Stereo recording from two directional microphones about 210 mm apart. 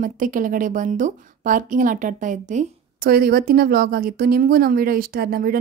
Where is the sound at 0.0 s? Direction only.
40° right (ahead or behind).